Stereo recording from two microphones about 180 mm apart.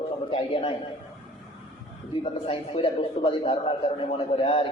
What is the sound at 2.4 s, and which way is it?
A man's voice, 30° left (ahead or behind).